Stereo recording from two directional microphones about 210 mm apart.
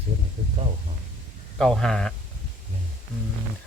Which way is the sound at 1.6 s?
5° left (ahead or behind).